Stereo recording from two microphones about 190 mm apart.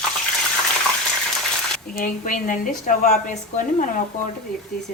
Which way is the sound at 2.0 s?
45° left (ahead or behind).